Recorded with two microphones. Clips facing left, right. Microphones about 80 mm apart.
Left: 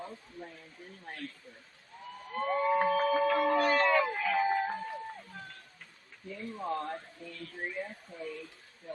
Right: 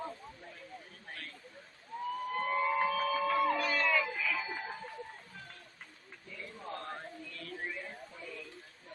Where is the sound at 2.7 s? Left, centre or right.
Left.